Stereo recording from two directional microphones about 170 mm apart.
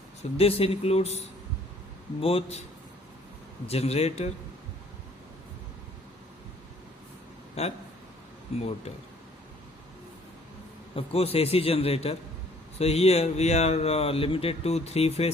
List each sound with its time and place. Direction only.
0.2 s speech: 35° left (ahead or behind)
2.2 s speech: 35° left (ahead or behind)
3.7 s speech: 35° left (ahead or behind)
7.6 s speech: 40° left (ahead or behind)
10.9 s speech: 35° left (ahead or behind)